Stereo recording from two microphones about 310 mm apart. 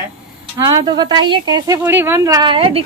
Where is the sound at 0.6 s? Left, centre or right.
Centre.